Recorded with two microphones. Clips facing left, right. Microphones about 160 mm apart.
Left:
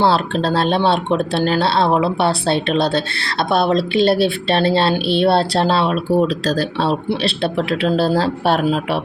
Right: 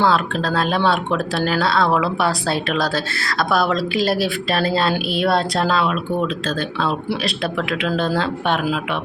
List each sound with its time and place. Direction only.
0.0 s speech: 30° left (ahead or behind)